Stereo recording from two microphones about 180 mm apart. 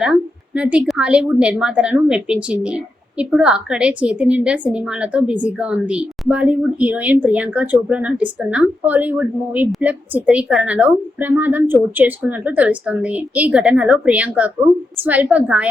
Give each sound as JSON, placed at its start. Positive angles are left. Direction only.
{"t": 0.0, "sound": "a woman's voice", "side_deg": -5}